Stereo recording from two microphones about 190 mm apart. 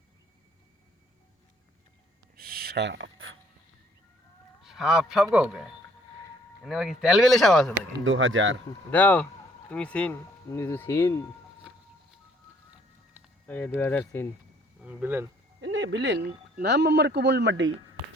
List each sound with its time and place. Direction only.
2.3 s a sound: 55° right (ahead or behind); by 3.3 s 85° right
4.6 s speech: centre (ahead or behind)
7.9 s speech: 90° right
8.9 s speech: 10° left (ahead or behind)
13.7 s speech: 10° left (ahead or behind)
14.8 s speech: 10° right (ahead or behind)
15.6 s speech: 75° right (ahead or behind)